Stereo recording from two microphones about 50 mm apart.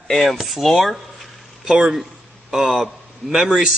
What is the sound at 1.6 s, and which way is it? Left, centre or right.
A man's voice, centre.